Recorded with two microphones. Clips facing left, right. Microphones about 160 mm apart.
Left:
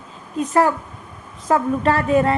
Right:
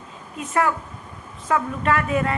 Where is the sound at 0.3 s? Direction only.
35° left (ahead or behind).